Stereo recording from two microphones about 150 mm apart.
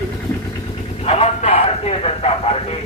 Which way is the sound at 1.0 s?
45° left (ahead or behind).